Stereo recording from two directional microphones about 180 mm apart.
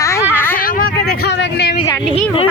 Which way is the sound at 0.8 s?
60° left (ahead or behind).